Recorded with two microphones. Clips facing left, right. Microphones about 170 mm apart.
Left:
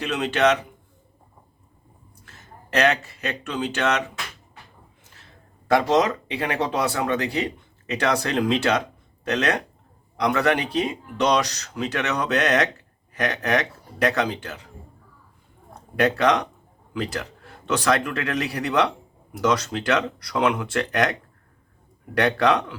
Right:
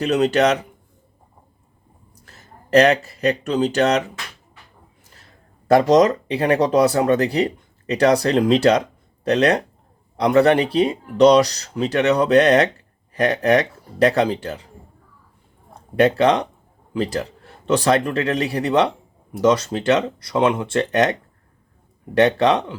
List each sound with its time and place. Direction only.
0.0 s speech: 40° right (ahead or behind)
2.2 s speech: 35° right (ahead or behind)
5.7 s speech: 40° right (ahead or behind)
16.0 s speech: 30° right (ahead or behind)